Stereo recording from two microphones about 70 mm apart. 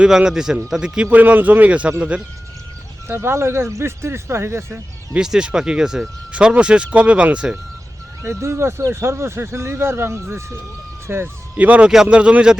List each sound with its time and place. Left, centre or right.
0.0 s speech: centre
1.1 s speech: right
3.1 s speech: right
5.2 s speech: centre
8.2 s speech: right
11.5 s speech: right
11.9 s speech: centre